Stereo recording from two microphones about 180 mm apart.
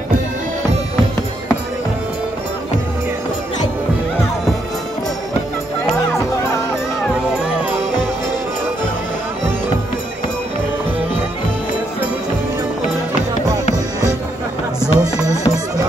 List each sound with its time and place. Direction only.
14.8 s music: 15° left (ahead or behind)